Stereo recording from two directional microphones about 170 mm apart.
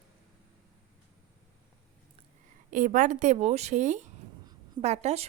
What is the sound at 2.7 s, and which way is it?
A woman's voice, 50° right (ahead or behind).